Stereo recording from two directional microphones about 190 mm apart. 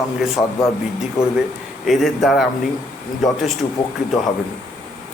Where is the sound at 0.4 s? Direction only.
10° left (ahead or behind).